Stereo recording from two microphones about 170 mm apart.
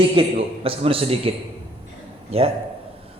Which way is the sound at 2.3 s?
35° right (ahead or behind).